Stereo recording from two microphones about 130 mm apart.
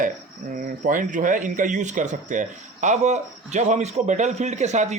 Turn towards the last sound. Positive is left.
turn(degrees=-60)  # may be behind; listen again after turning